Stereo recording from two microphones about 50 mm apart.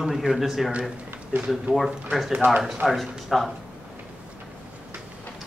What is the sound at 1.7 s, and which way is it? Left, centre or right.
Speech, right.